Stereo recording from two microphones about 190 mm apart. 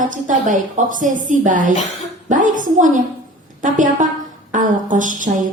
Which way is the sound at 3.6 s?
40° right (ahead or behind).